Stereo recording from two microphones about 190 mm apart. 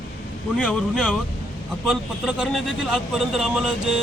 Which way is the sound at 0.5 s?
5° left (ahead or behind).